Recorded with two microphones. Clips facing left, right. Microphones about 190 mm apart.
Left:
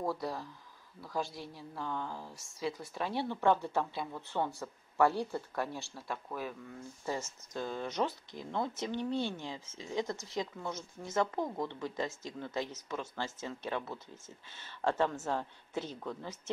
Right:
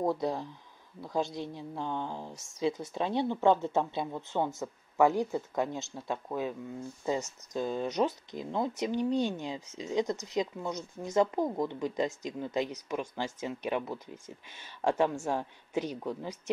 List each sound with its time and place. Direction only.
0.0 s speech: 20° right (ahead or behind)